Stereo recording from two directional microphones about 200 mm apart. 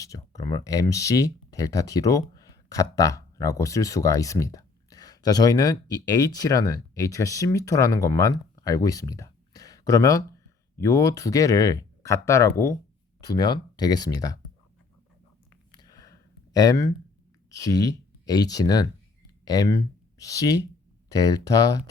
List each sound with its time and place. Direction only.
0.0 s speech: 15° left (ahead or behind)
15.7 s a sound: 20° left (ahead or behind)
17.5 s speech: 15° left (ahead or behind)